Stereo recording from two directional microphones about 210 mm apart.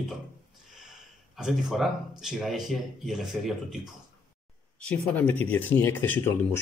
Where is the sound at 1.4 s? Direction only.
Centre (ahead or behind).